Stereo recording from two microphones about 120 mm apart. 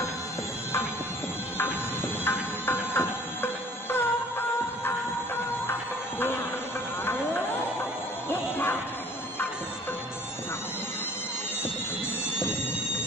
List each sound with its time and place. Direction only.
2.2 s music: 20° left (ahead or behind)
7.0 s a sound: 20° left (ahead or behind)
8.3 s music: 20° left (ahead or behind)